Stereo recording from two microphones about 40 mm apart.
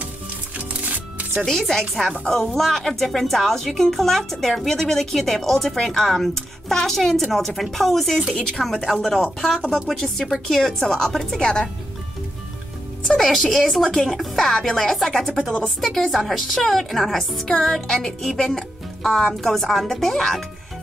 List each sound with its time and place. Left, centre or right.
0.6 s music: right
1.4 s speech: centre
11.3 s music: left
13.1 s music: centre
13.4 s speech: centre
16.2 s speech: centre
17.8 s music: centre
18.4 s speech: centre